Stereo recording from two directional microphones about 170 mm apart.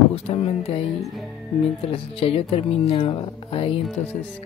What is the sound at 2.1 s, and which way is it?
Speech, 35° left (ahead or behind).